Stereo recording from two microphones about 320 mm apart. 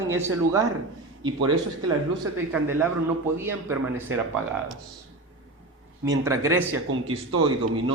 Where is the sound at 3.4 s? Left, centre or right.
Centre.